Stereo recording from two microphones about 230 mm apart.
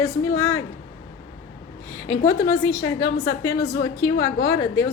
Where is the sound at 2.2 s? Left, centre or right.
Centre.